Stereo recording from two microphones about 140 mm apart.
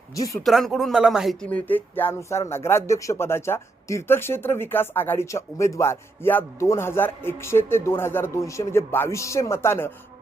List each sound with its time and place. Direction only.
0.1 s speech: 25° left (ahead or behind)
0.4 s speech: centre (ahead or behind)
1.5 s speech: 10° left (ahead or behind)